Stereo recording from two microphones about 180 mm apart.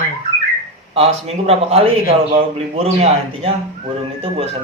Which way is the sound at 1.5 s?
35° right (ahead or behind).